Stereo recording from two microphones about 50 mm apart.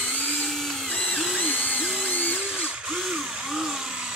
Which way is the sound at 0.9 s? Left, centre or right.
Left.